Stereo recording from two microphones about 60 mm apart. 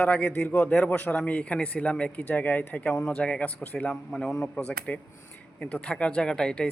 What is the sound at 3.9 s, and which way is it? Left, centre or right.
Speech, centre.